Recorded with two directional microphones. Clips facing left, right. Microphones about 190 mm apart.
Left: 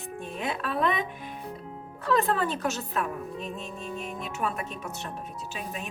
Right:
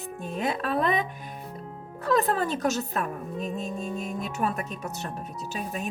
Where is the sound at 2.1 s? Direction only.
40° right (ahead or behind).